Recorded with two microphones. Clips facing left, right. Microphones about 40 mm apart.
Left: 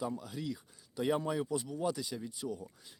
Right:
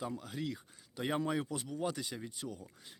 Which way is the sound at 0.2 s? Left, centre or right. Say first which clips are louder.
Even; right.